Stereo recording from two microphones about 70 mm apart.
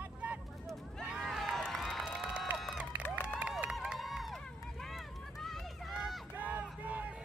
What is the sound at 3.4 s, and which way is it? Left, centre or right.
Run, centre.